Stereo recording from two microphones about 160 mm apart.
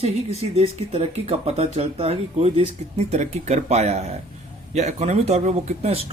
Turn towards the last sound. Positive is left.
turn(degrees=-40)  # may be behind; listen again after turning